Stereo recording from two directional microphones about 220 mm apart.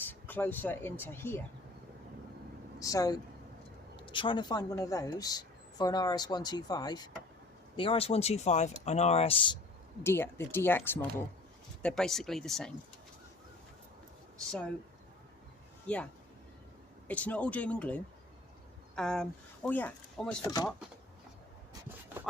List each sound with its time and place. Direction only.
0.1 s speech: 10° left (ahead or behind)
2.7 s speech: 15° left (ahead or behind)
10.0 s speech: 10° left (ahead or behind)
15.9 s speech: 5° left (ahead or behind)
17.1 s speech: 5° left (ahead or behind)